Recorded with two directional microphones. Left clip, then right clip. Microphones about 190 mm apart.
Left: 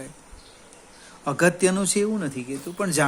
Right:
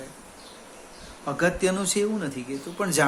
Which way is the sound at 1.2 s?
50° left (ahead or behind).